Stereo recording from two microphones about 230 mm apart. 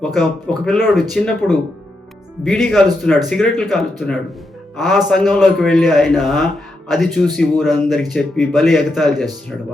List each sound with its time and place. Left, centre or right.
0.0 s a man's voice: centre